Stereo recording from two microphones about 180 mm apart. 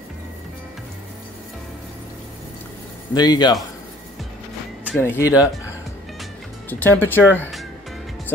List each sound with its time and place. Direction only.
3.2 s speech: 25° left (ahead or behind)
5.0 s speech: 15° left (ahead or behind)
6.7 s speech: 10° left (ahead or behind)